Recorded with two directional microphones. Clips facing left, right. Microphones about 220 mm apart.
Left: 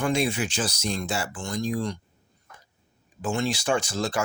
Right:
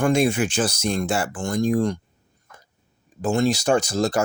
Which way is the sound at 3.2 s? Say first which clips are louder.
Right 6 dB; 40° right (ahead or behind).